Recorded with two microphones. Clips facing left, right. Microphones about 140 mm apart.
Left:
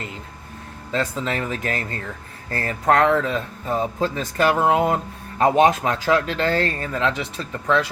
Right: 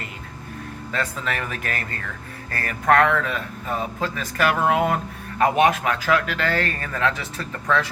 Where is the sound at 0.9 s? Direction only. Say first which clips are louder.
Left 4 dB; 25° left (ahead or behind).